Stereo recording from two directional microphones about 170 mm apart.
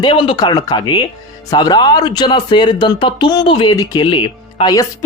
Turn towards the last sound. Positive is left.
turn(degrees=25)  # may be behind; listen again after turning